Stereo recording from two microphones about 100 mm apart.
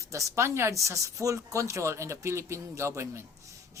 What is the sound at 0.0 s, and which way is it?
Speech, 30° right (ahead or behind).